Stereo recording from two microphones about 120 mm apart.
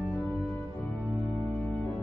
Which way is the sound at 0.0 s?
15° left (ahead or behind).